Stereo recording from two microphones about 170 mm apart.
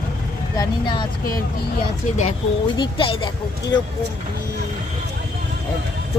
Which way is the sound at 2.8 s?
30° left (ahead or behind).